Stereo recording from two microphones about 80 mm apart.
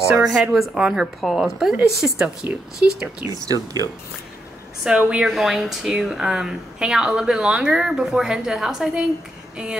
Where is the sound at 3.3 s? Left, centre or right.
Right.